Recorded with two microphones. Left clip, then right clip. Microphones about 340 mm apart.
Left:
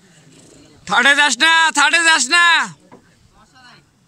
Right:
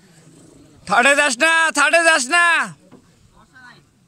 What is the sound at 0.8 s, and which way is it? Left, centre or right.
A man's voice, centre.